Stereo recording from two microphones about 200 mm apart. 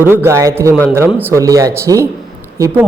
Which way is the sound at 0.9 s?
10° right (ahead or behind).